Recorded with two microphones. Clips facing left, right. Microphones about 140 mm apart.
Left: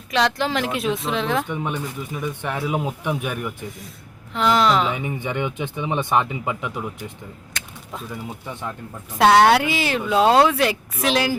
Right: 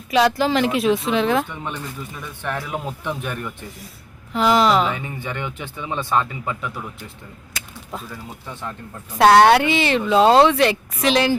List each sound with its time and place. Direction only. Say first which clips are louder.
0.1 s speech: right 4 dB; 5° right (ahead or behind)
1.5 s speech: left 4 dB; 15° left (ahead or behind)
4.4 s speech: right 2 dB; 5° right (ahead or behind)
4.9 s speech: left 2 dB; 15° left (ahead or behind)
7.6 s a sound: even; 5° right (ahead or behind)
8.1 s speech: left 3 dB; 15° left (ahead or behind)
9.1 s speech: right 2 dB; centre (ahead or behind)